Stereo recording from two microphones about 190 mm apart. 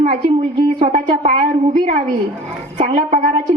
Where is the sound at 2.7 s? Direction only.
35° right (ahead or behind).